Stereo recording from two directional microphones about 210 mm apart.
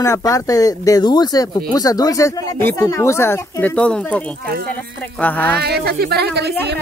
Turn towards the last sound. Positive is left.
turn(degrees=-50)  # may be behind; listen again after turning